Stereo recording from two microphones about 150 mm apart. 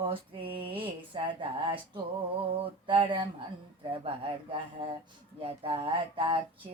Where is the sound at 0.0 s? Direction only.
35° right (ahead or behind).